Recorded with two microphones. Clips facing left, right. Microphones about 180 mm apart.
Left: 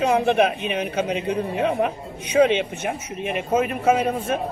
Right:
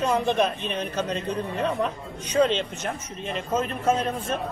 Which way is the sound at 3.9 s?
10° left (ahead or behind).